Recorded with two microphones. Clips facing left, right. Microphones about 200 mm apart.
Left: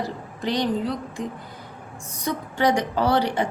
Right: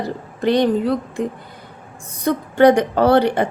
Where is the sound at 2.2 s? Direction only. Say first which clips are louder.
Right 9 dB; 55° right (ahead or behind).